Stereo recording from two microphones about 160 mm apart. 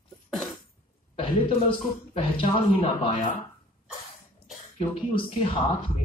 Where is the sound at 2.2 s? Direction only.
35° left (ahead or behind).